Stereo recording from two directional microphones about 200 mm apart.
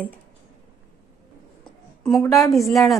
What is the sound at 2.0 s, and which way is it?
Speech, 5° left (ahead or behind).